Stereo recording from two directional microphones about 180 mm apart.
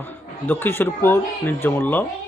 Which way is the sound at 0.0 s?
10° left (ahead or behind).